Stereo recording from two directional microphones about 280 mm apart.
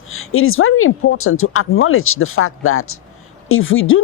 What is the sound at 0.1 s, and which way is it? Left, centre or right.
Speech, left.